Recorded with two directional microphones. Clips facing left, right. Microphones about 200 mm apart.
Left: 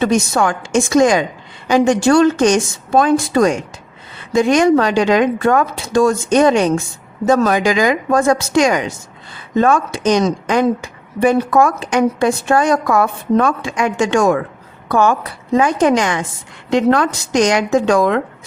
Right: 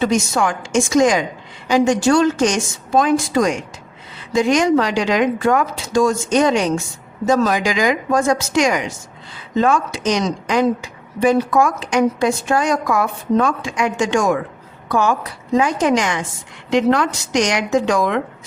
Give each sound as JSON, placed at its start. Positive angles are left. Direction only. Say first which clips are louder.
{"t": 0.0, "sound": "a woman's voice", "louder": "left 2 dB", "side_deg": 60}